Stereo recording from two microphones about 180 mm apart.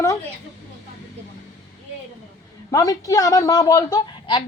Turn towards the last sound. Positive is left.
turn(degrees=25)  # may be behind; listen again after turning